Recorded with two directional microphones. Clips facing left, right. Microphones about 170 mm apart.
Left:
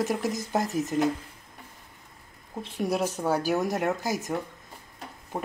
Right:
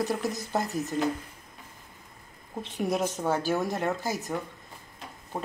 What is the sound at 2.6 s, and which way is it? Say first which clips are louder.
Speech: left 1 dB; centre (ahead or behind).